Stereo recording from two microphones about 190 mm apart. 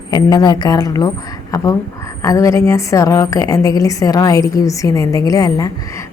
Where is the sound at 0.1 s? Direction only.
20° left (ahead or behind).